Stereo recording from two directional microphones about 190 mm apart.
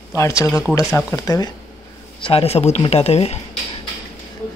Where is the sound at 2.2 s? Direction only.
30° left (ahead or behind).